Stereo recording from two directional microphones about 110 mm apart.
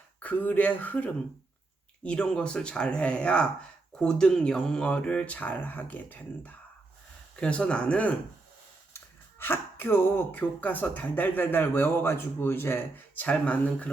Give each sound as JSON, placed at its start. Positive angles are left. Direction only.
{"t": 0.2, "sound": "speech", "side_deg": 15}
{"t": 9.4, "sound": "speech", "side_deg": 20}